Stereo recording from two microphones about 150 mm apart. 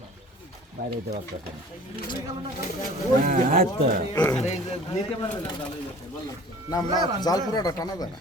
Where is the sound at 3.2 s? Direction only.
55° right (ahead or behind).